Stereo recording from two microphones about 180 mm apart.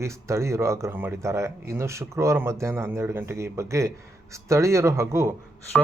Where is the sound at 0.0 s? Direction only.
15° right (ahead or behind).